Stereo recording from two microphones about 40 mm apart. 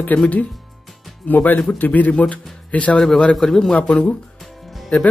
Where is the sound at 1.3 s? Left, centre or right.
Left.